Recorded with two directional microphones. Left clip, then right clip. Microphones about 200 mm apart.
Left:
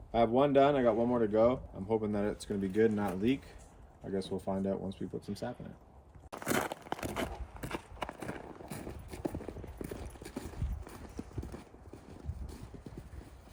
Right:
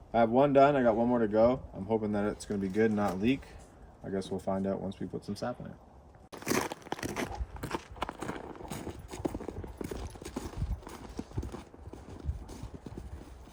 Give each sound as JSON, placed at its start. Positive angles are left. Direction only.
{"t": 0.1, "sound": "speech", "side_deg": -5}
{"t": 4.0, "sound": "speech", "side_deg": 0}
{"t": 6.5, "sound": "a sound", "side_deg": 0}
{"t": 11.5, "sound": "clip-clop", "side_deg": -15}